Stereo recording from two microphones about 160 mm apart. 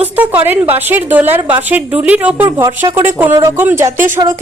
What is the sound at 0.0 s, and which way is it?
A woman's voice, 10° right (ahead or behind).